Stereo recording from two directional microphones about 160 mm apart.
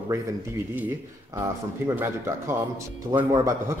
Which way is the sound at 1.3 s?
15° right (ahead or behind).